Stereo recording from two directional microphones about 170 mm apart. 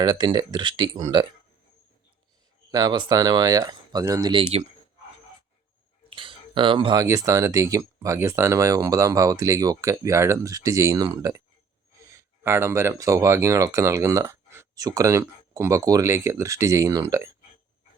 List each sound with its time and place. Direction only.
0.0 s speech: 25° right (ahead or behind)
2.7 s speech: 25° right (ahead or behind)
6.1 s speech: 30° right (ahead or behind)